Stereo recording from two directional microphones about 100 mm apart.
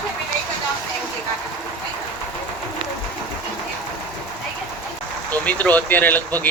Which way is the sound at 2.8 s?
60° right (ahead or behind).